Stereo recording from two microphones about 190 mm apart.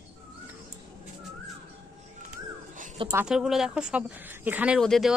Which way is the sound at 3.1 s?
5° right (ahead or behind).